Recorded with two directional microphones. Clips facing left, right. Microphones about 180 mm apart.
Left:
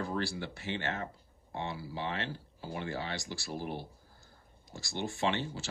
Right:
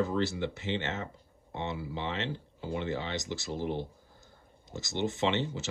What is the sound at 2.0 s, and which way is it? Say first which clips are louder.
Speech: right 1 dB; 20° right (ahead or behind).